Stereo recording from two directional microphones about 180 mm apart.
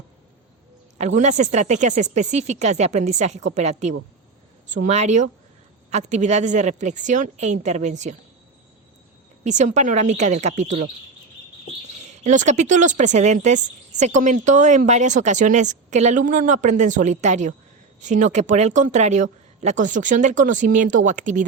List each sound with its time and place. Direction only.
0.9 s speech: 40° right (ahead or behind)
9.4 s speech: 40° right (ahead or behind)
12.2 s speech: 45° right (ahead or behind)